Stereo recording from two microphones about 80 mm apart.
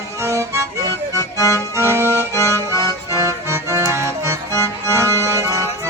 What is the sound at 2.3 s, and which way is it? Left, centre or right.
Accordion, left.